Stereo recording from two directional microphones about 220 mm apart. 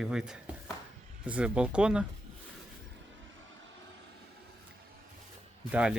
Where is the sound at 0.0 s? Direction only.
5° right (ahead or behind).